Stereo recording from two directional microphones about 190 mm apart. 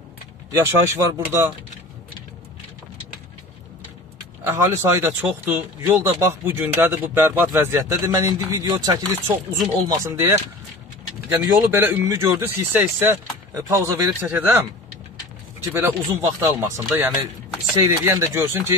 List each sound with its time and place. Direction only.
0.5 s speech: 15° right (ahead or behind)
4.5 s speech: 10° right (ahead or behind)
15.8 s speech: 15° right (ahead or behind)